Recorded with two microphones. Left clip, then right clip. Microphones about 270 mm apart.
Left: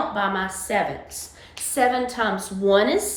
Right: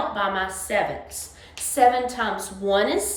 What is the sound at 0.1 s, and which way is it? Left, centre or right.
A woman's voice, centre.